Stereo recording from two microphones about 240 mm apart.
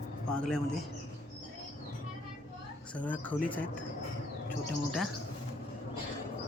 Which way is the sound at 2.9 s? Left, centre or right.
Centre.